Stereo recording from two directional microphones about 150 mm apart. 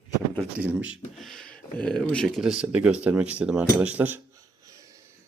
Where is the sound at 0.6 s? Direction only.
10° right (ahead or behind).